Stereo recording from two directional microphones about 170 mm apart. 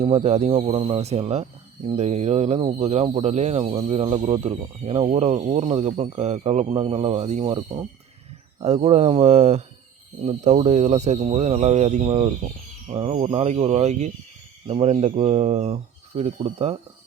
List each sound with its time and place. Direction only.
0.0 s speech: 35° right (ahead or behind)
8.6 s speech: 40° right (ahead or behind)